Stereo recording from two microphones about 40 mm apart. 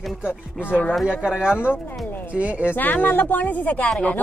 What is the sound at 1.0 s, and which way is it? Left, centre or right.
Speech, right.